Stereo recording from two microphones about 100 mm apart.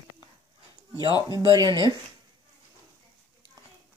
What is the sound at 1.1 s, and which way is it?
Speech, 45° left (ahead or behind).